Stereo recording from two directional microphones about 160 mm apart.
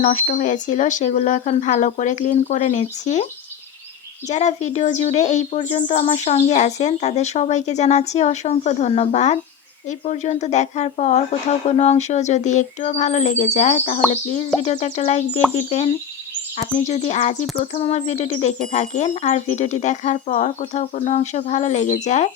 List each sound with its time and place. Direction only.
0.0 s speech: 55° left (ahead or behind)
4.3 s speech: 45° left (ahead or behind)